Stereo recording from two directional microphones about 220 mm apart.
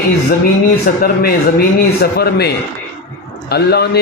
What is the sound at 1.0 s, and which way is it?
A man's voice, 45° left (ahead or behind).